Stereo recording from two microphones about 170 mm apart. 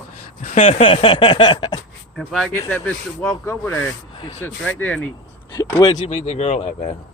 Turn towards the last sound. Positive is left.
turn(degrees=40)  # may be behind; listen again after turning